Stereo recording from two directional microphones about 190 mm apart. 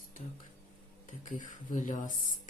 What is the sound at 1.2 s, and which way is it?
Speech, 45° left (ahead or behind).